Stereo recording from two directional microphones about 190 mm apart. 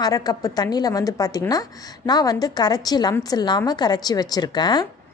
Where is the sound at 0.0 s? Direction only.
20° left (ahead or behind).